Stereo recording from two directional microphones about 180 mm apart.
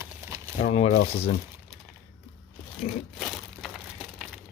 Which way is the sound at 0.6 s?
35° left (ahead or behind).